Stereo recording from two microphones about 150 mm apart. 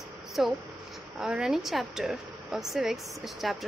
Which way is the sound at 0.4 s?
Centre (ahead or behind).